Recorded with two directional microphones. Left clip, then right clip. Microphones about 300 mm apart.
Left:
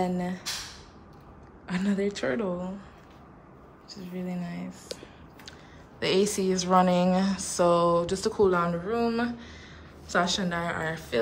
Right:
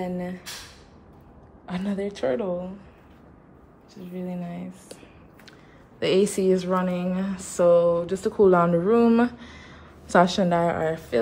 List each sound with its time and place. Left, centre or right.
0.0 s speech: centre
1.7 s speech: centre
3.9 s speech: centre
5.9 s a woman's voice: centre